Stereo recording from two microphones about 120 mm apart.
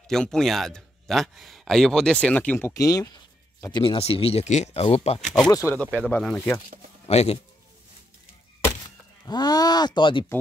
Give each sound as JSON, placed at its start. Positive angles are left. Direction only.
{"t": 0.1, "sound": "speech", "side_deg": 5}
{"t": 2.7, "sound": "speech", "side_deg": 30}
{"t": 3.8, "sound": "speech", "side_deg": 50}
{"t": 4.8, "sound": "speech", "side_deg": 60}
{"t": 5.7, "sound": "speech", "side_deg": 10}
{"t": 7.1, "sound": "speech", "side_deg": 60}
{"t": 8.8, "sound": "speech", "side_deg": 35}